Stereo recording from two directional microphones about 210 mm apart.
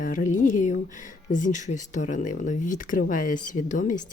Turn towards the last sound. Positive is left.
turn(degrees=35)  # may be behind; listen again after turning